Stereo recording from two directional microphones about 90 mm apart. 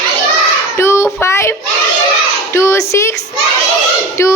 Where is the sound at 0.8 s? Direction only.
30° left (ahead or behind).